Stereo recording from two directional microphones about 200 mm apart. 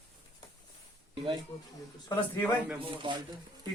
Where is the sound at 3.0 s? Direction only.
20° right (ahead or behind).